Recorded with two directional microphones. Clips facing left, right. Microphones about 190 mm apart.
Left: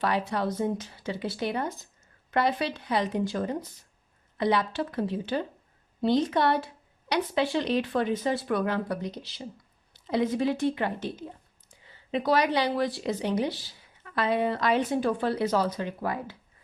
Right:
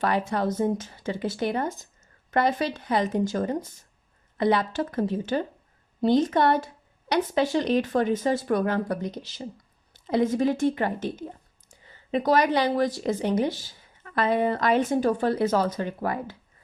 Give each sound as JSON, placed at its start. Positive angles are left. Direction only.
{"t": 0.0, "sound": "a woman's voice", "side_deg": -45}